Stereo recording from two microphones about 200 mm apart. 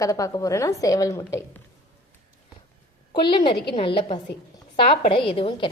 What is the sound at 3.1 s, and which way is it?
A woman's voice, 25° left (ahead or behind).